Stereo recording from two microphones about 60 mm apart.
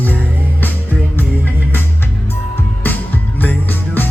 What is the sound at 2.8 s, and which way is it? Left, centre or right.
Music, left.